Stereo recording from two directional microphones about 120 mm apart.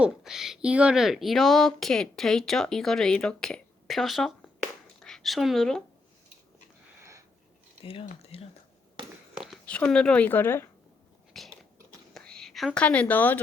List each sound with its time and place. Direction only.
0.0 s speech: 5° right (ahead or behind)
7.9 s speech: 55° left (ahead or behind)
9.6 s a woman's voice: 10° left (ahead or behind)
11.3 s biting: centre (ahead or behind)
12.1 s whispering: 5° left (ahead or behind)
12.8 s a woman's voice: 10° left (ahead or behind)